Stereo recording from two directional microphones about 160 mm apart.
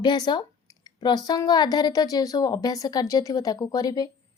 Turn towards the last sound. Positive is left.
turn(degrees=25)  # may be behind; listen again after turning